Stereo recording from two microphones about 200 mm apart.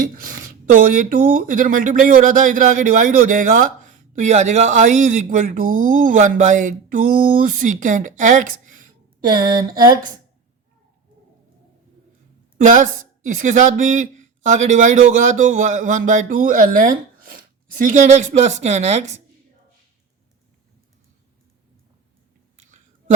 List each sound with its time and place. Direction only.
0.2 s speech: 45° right (ahead or behind)
9.3 s a sound: 50° right (ahead or behind)
12.5 s speech: 40° right (ahead or behind)